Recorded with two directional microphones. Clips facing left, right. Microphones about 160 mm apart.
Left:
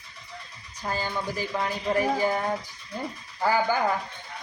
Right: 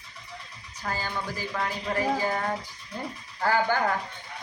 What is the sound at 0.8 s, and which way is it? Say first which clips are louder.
Speech: left 2 dB; 20° left (ahead or behind).